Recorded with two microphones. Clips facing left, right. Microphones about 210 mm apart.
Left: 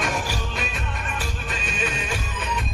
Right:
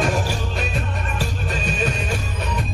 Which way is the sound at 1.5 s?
40° right (ahead or behind).